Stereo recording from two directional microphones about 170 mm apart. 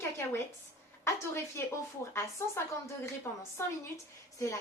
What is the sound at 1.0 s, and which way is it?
Speech, 15° left (ahead or behind).